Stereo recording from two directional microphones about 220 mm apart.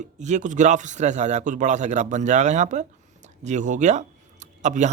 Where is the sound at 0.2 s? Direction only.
35° right (ahead or behind).